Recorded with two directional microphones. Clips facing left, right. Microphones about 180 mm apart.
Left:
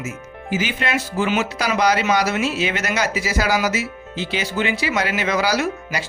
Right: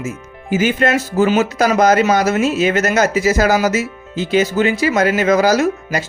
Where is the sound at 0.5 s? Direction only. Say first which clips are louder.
Right 8 dB; 45° right (ahead or behind).